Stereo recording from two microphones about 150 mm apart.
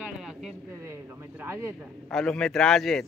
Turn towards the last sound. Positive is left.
turn(degrees=5)  # may be behind; listen again after turning